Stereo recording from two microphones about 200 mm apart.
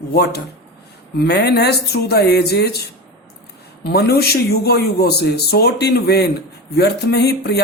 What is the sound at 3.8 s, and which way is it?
Speech, 55° left (ahead or behind).